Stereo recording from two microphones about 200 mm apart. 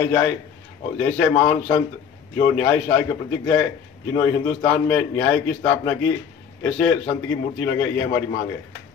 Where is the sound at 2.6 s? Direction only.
15° left (ahead or behind).